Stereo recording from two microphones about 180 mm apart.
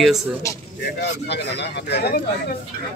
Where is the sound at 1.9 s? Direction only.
60° left (ahead or behind).